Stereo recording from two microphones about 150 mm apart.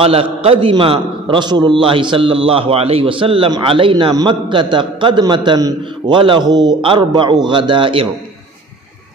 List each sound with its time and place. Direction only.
0.0 s a man's voice: 40° right (ahead or behind)